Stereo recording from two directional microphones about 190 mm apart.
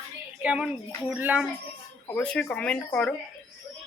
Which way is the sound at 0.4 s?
5° right (ahead or behind).